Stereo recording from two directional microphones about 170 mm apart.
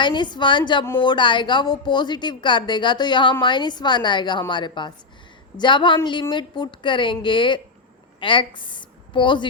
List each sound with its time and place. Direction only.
0.0 s a woman's voice: 25° left (ahead or behind)